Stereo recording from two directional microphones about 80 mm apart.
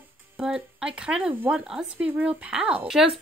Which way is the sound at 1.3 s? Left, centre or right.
Right.